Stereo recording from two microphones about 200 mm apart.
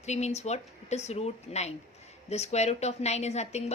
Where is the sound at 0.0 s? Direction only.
35° left (ahead or behind).